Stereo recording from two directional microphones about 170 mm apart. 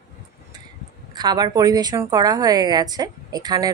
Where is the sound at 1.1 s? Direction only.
25° right (ahead or behind).